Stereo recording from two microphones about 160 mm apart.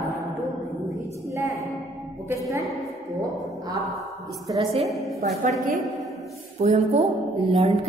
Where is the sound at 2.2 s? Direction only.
20° right (ahead or behind).